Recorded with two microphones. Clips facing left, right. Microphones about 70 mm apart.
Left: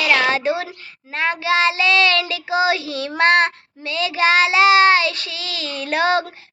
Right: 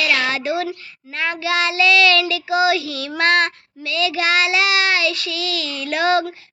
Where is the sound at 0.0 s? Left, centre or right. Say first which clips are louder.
Left 3 dB; left.